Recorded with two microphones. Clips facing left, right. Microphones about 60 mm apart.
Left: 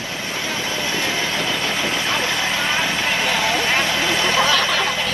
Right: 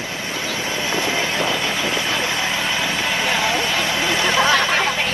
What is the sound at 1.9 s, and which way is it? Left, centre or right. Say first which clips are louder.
Vehicle: even; right.